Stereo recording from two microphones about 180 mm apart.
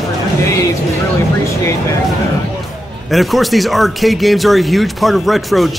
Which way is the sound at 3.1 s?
Centre (ahead or behind).